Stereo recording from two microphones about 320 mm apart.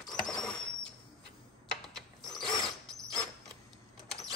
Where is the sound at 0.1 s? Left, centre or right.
Centre.